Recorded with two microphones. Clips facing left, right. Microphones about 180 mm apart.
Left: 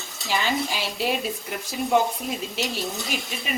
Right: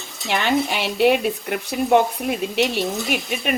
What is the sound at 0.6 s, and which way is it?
Speech, 65° right (ahead or behind).